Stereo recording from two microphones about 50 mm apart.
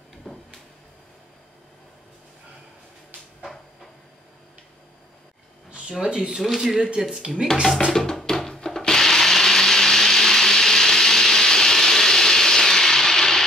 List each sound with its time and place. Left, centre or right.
0.3 s a sound: centre
5.7 s speech: centre
6.4 s speech: centre
7.9 s music: centre